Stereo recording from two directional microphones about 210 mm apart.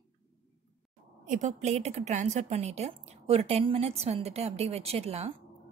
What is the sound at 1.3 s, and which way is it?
A woman's voice, 35° right (ahead or behind).